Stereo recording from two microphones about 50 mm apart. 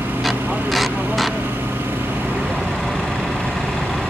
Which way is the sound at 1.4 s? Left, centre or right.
Right.